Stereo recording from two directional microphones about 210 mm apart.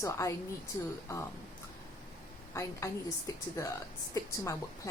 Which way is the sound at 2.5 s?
15° left (ahead or behind).